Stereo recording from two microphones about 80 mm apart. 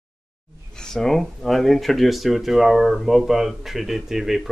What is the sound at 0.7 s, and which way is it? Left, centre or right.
Speech, centre.